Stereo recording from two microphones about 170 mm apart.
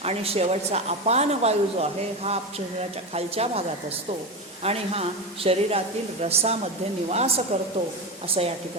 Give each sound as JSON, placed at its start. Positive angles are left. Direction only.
{"t": 0.0, "sound": "a woman's voice", "side_deg": -35}
{"t": 4.6, "sound": "a woman's voice", "side_deg": -35}